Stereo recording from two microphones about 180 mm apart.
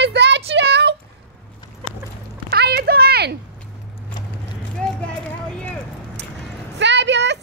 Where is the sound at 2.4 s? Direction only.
65° right (ahead or behind).